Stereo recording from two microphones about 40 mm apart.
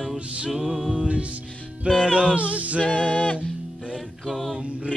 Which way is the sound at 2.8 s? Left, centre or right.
Left.